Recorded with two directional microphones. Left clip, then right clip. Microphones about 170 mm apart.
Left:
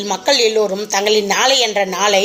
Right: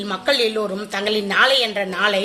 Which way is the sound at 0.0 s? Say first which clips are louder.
Left 5 dB; 20° left (ahead or behind).